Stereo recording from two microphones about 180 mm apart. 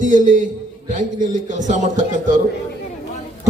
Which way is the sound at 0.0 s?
45° right (ahead or behind).